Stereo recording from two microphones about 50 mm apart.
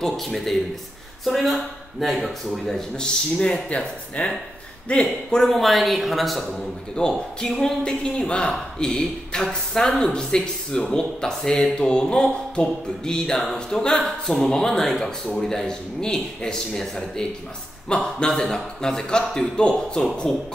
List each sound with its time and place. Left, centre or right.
0.0 s speech: centre
3.7 s speech: left
5.3 s speech: centre
6.5 s speech: centre
13.4 s speech: centre